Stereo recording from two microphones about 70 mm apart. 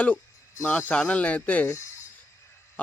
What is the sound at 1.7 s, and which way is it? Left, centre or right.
Speech, left.